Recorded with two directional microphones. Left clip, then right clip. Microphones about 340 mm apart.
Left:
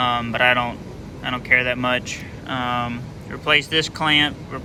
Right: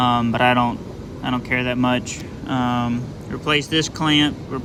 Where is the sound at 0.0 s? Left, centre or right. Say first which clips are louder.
Right 1 dB; centre.